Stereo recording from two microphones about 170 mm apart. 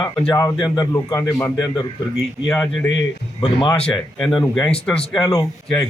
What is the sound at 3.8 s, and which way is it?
Speech, 5° left (ahead or behind).